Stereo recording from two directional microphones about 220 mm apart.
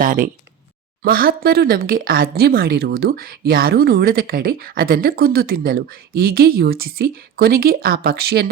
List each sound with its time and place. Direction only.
0.0 s speech: 40° right (ahead or behind)